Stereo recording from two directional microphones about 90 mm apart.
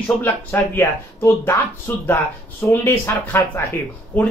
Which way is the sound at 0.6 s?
25° left (ahead or behind).